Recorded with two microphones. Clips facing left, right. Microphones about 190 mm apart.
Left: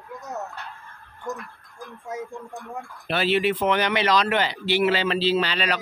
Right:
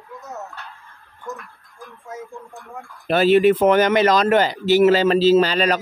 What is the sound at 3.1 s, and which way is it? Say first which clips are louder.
Speech: right 8 dB; 45° right (ahead or behind).